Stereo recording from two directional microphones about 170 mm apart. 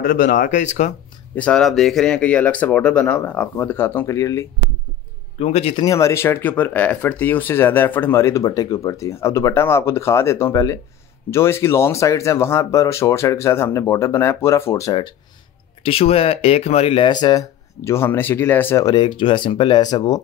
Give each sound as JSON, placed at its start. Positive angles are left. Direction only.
{"t": 0.0, "sound": "speech", "side_deg": 55}
{"t": 1.3, "sound": "speech", "side_deg": 5}
{"t": 5.4, "sound": "speech", "side_deg": 35}
{"t": 5.9, "sound": "speech", "side_deg": 15}
{"t": 18.9, "sound": "speech", "side_deg": 30}